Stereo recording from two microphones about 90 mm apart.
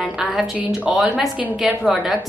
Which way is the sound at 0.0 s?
5° right (ahead or behind).